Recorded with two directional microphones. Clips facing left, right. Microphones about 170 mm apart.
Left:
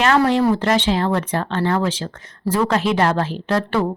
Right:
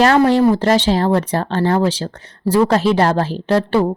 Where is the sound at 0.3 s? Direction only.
35° right (ahead or behind).